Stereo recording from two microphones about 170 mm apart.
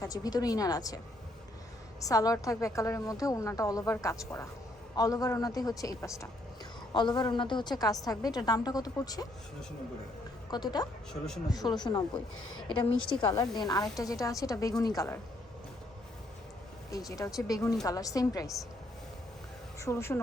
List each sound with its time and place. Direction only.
0.0 s a woman's voice: 20° left (ahead or behind)
2.0 s a woman's voice: 20° left (ahead or behind)
10.5 s a woman's voice: 25° left (ahead or behind)
17.1 s a woman's voice: 20° left (ahead or behind)
19.8 s speech: 15° left (ahead or behind)